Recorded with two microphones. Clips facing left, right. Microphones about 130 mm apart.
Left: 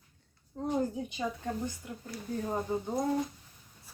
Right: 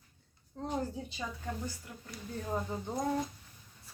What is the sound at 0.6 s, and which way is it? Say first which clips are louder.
Speech: left 5 dB; 10° left (ahead or behind).